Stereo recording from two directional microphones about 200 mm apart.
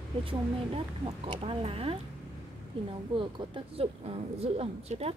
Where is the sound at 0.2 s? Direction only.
25° right (ahead or behind).